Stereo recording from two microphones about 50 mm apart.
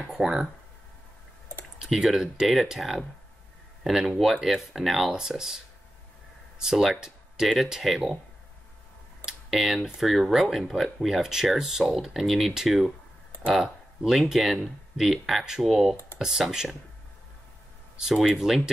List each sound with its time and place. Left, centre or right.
0.1 s speech: centre
1.9 s speech: centre
6.6 s speech: centre
9.2 s computer keyboard: centre
9.9 s speech: centre
17.9 s speech: centre